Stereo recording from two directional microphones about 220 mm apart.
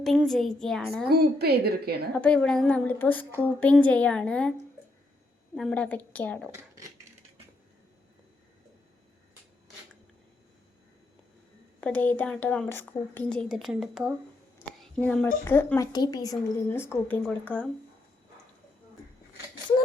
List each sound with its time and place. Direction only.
0.0 s speech: centre (ahead or behind)
1.0 s a woman's voice: 45° right (ahead or behind)
2.1 s speech: 5° left (ahead or behind)
5.5 s a woman's voice: 5° left (ahead or behind)
11.8 s a woman's voice: 5° left (ahead or behind)